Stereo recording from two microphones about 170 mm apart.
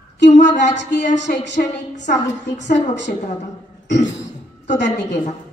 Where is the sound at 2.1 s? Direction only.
65° left (ahead or behind).